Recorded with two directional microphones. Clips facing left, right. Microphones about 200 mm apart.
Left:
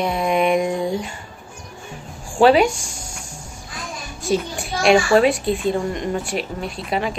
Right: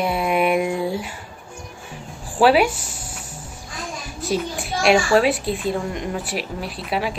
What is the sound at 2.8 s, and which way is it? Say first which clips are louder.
Music: even; 45° left (ahead or behind).